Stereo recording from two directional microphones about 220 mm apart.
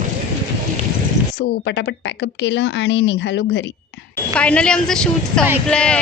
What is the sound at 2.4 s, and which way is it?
Speech, 55° left (ahead or behind).